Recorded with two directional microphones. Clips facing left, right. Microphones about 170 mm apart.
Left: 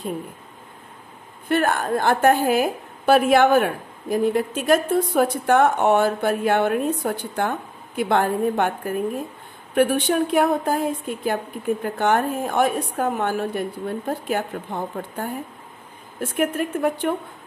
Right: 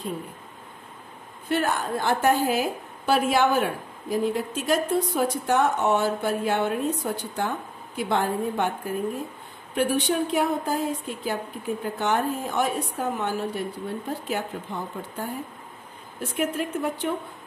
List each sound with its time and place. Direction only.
1.5 s a woman's voice: 55° left (ahead or behind)
9.8 s a woman's voice: 55° left (ahead or behind)